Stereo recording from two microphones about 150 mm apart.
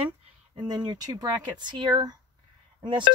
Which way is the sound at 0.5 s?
30° right (ahead or behind).